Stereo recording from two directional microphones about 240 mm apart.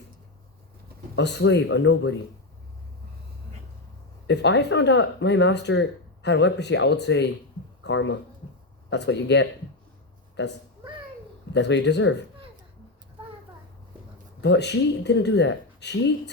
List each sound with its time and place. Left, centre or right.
1.1 s speech: left
4.3 s speech: left
14.4 s speech: left